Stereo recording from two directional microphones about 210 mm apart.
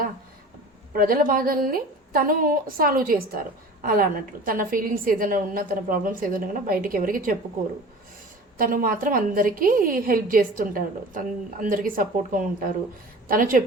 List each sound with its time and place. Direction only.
0.9 s a woman's voice: 40° right (ahead or behind)
8.5 s a woman's voice: 40° right (ahead or behind)